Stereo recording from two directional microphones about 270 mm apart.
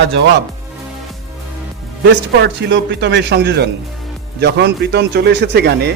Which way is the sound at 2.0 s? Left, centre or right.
Right.